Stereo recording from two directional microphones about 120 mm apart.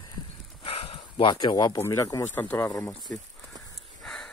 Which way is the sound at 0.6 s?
50° left (ahead or behind).